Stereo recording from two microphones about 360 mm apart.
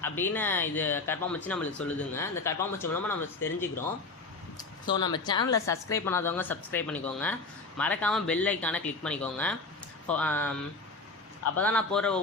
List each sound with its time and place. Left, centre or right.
0.0 s a woman's voice: centre
4.9 s a woman's voice: centre
11.5 s speech: centre